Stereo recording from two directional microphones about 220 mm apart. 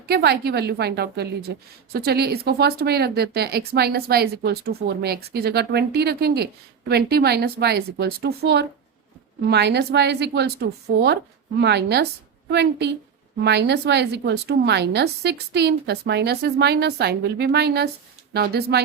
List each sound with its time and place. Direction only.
0.1 s a woman's voice: 45° right (ahead or behind)